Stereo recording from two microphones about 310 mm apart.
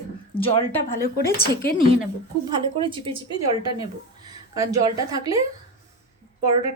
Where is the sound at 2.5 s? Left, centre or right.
Centre.